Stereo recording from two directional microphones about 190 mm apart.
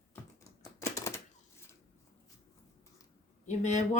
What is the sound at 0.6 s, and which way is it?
Typewriter, 15° left (ahead or behind).